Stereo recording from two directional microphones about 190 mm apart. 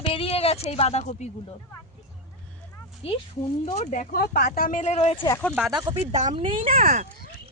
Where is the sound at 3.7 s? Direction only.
40° left (ahead or behind).